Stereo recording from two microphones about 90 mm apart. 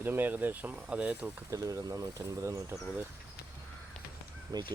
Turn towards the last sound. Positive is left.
turn(degrees=-50)  # may be behind; listen again after turning